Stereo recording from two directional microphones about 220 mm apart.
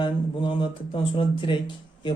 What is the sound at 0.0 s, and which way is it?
Speech, 20° left (ahead or behind).